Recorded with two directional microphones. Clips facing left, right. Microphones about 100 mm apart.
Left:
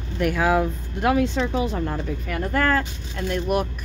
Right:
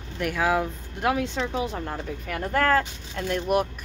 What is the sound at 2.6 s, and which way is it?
Speech, 65° right (ahead or behind).